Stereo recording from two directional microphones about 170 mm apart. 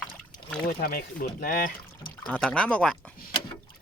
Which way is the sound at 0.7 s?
60° left (ahead or behind).